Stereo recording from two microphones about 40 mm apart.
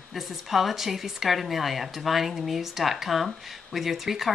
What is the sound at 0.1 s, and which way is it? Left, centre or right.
Speech, centre.